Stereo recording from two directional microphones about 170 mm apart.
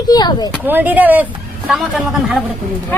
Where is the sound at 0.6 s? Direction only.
10° right (ahead or behind).